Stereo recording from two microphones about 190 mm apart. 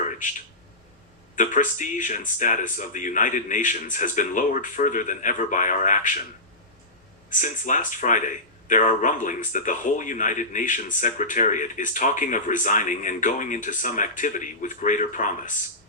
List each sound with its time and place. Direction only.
1.4 s speech: 40° left (ahead or behind)
7.3 s speech: 40° left (ahead or behind)